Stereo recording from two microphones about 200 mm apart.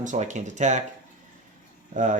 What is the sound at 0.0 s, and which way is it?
Speech, 40° right (ahead or behind).